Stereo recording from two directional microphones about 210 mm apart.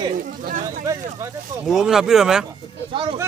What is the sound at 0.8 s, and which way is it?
Speech, 15° right (ahead or behind).